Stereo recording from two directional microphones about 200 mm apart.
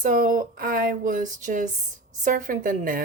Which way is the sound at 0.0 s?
45° right (ahead or behind).